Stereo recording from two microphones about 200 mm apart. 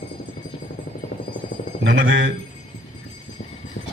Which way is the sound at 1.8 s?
70° right (ahead or behind).